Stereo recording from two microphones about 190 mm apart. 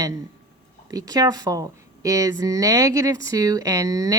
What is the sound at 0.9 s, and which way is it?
Speech, 20° right (ahead or behind).